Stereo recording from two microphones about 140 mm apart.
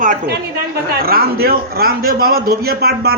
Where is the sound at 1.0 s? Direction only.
90° right.